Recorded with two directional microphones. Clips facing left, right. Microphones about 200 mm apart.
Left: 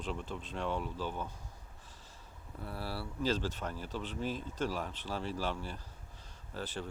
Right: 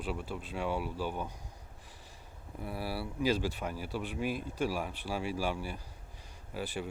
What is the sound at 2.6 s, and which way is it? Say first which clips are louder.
Speech: right 3 dB; 10° right (ahead or behind).